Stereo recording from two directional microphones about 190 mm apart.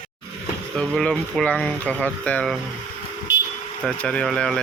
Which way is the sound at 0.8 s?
5° left (ahead or behind).